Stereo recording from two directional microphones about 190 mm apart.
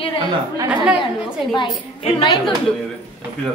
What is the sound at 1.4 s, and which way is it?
Speech, 25° left (ahead or behind).